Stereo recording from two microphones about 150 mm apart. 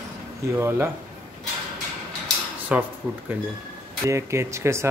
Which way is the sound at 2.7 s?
10° right (ahead or behind).